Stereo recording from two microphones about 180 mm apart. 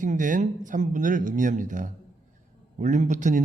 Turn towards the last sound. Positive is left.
turn(degrees=-45)  # may be behind; listen again after turning